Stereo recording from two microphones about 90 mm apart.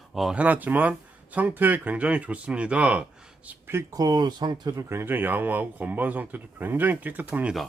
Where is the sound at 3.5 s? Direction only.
25° right (ahead or behind).